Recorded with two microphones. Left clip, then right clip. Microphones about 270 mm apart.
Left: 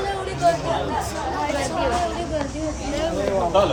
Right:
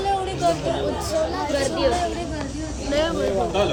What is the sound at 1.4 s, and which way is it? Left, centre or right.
Speech, centre.